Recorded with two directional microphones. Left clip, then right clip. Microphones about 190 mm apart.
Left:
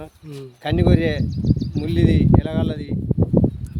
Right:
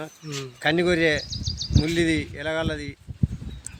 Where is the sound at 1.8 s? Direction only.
10° right (ahead or behind).